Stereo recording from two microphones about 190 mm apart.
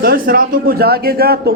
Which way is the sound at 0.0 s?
50° right (ahead or behind).